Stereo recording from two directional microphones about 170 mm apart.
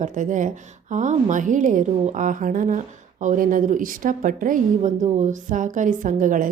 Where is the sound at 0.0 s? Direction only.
50° right (ahead or behind).